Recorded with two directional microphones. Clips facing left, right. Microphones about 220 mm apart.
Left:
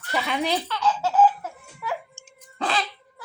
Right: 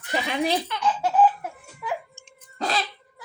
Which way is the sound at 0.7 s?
15° right (ahead or behind).